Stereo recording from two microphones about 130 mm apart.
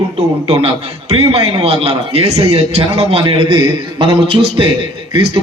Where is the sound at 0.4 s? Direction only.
50° right (ahead or behind).